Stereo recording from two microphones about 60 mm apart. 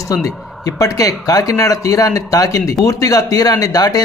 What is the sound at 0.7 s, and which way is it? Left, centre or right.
Speech, left.